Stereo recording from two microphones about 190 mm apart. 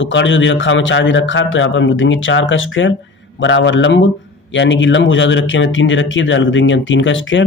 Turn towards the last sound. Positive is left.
turn(degrees=80)